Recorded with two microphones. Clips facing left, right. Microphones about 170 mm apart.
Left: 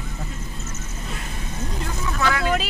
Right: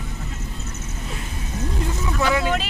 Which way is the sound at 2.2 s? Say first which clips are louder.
Right 2 dB; 15° right (ahead or behind).